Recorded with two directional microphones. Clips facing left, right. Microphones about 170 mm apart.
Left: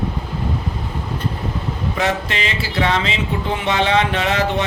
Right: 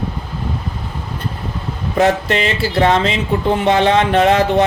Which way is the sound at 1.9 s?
45° right (ahead or behind).